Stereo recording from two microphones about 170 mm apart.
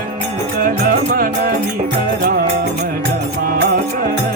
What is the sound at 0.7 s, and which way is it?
Music, 55° right (ahead or behind).